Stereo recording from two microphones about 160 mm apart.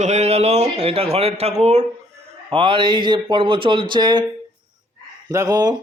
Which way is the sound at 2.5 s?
30° right (ahead or behind).